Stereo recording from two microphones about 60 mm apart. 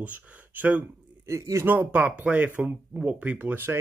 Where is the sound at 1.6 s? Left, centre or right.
Right.